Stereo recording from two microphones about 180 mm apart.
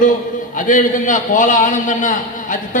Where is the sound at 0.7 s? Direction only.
45° left (ahead or behind).